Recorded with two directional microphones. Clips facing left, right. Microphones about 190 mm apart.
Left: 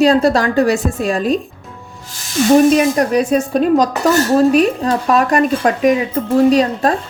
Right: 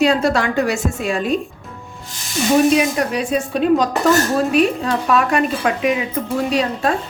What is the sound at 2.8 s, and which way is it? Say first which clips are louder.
Speech: left 5 dB; 40° left (ahead or behind).